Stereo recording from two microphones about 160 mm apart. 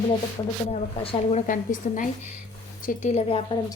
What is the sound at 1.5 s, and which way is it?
A woman's voice, 55° left (ahead or behind).